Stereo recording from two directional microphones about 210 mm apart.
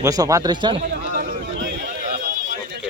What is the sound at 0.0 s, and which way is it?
Speech, 15° right (ahead or behind).